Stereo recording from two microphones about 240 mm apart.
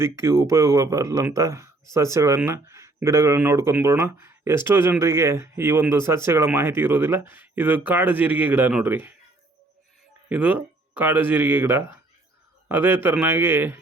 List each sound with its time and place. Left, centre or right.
0.0 s speech: centre
10.2 s speech: centre